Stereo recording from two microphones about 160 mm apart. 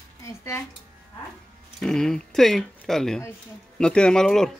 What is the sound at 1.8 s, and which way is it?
Speech, 5° left (ahead or behind).